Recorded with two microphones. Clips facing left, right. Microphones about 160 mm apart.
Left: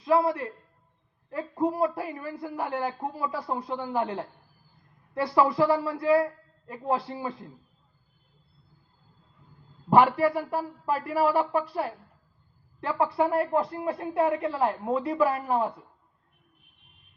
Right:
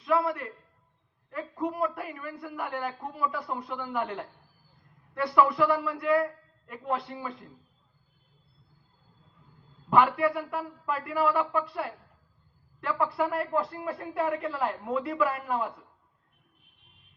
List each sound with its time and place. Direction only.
0.0 s a man's voice: 30° left (ahead or behind)
9.9 s speech: 25° left (ahead or behind)